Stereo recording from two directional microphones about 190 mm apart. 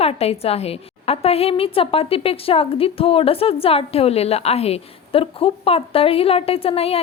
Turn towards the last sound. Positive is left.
turn(degrees=30)  # may be behind; listen again after turning